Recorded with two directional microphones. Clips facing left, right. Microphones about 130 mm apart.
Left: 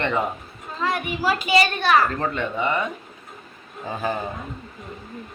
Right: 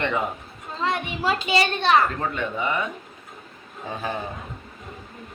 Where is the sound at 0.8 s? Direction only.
25° right (ahead or behind).